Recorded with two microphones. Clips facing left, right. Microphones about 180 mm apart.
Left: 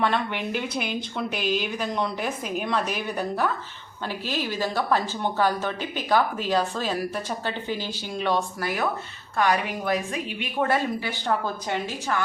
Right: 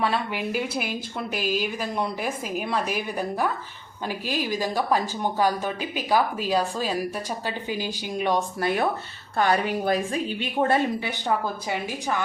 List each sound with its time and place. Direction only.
0.0 s a woman's voice: 5° right (ahead or behind); by 11.1 s 25° right (ahead or behind)
11.3 s speech: 5° right (ahead or behind)